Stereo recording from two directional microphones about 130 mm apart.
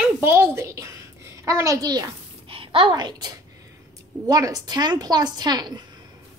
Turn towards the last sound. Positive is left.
turn(degrees=-30)  # may be behind; listen again after turning